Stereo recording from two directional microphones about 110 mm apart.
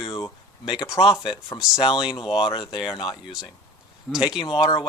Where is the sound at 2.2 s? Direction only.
55° left (ahead or behind).